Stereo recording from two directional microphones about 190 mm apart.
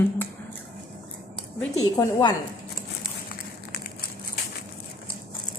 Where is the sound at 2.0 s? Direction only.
20° left (ahead or behind).